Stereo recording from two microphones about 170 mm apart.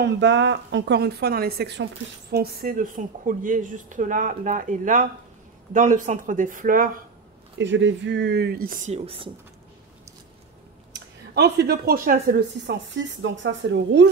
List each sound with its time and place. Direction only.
0.0 s a woman's voice: 90° right
2.3 s speech: 60° right (ahead or behind)
7.5 s speech: 90° right; by 8.9 s 60° right (ahead or behind)
8.9 s speech: 35° right (ahead or behind)
10.9 s speech: 75° right (ahead or behind)